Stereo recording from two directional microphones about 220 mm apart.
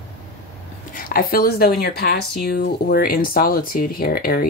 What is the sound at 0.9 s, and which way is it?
Speech, 40° left (ahead or behind).